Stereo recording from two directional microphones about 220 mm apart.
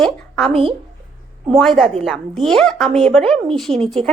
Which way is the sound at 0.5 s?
25° right (ahead or behind).